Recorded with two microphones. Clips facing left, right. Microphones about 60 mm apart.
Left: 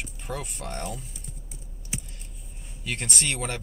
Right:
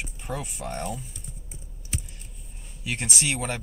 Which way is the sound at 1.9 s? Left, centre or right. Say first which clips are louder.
Right 1 dB; centre.